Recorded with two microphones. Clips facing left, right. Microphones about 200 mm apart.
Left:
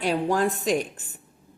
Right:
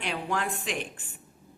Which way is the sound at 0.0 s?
40° left (ahead or behind).